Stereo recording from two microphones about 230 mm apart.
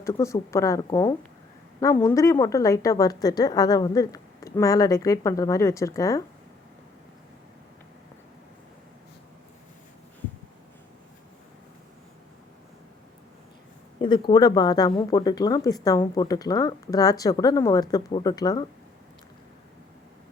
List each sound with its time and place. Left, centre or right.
0.0 s speech: centre
14.0 s speech: left